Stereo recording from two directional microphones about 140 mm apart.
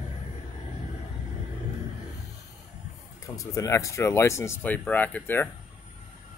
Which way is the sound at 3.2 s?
25° left (ahead or behind).